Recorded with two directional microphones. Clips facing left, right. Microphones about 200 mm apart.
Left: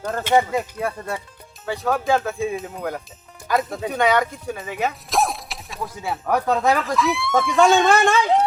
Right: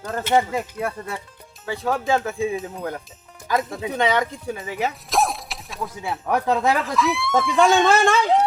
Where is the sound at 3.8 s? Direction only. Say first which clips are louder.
Left 3 dB; 20° right (ahead or behind).